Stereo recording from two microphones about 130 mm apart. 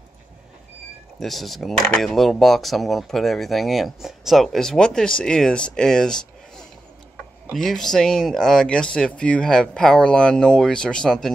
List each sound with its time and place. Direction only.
1.2 s speech: centre (ahead or behind)